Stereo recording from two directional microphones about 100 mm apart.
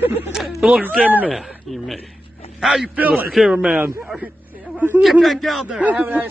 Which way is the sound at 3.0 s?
15° right (ahead or behind).